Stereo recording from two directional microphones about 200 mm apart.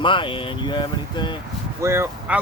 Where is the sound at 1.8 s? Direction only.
15° right (ahead or behind).